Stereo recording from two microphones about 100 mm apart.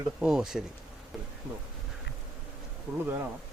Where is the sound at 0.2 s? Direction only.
5° right (ahead or behind).